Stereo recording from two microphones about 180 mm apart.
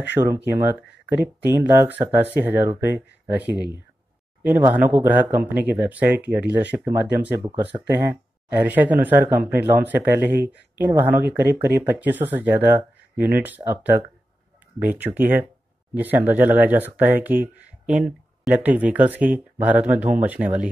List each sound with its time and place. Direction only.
0.2 s speech: 30° right (ahead or behind)
0.6 s speech: 10° right (ahead or behind)
14.9 s speech: 10° right (ahead or behind)